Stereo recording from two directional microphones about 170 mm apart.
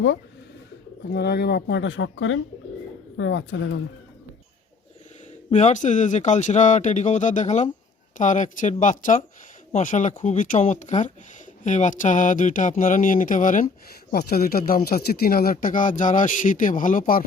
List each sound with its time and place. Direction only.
1.1 s speech: 70° left (ahead or behind); by 2.2 s 90° left
5.5 s speech: 45° left (ahead or behind)
14.1 s speech: 65° left (ahead or behind)